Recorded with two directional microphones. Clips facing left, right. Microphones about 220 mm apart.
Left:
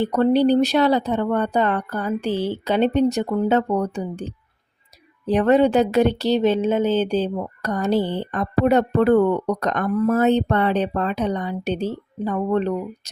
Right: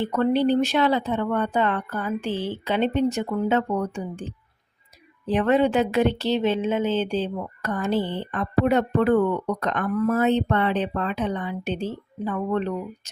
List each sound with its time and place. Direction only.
0.0 s speech: 35° left (ahead or behind)